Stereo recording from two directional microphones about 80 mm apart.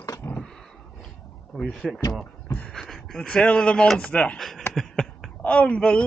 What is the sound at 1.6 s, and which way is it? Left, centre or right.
Speech, centre.